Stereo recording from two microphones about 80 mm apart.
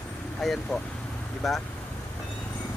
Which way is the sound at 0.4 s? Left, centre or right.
Centre.